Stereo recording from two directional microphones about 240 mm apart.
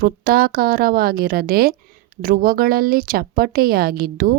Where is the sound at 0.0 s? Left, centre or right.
Right.